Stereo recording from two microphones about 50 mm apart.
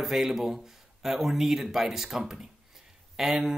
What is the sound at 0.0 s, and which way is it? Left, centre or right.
Speech, centre.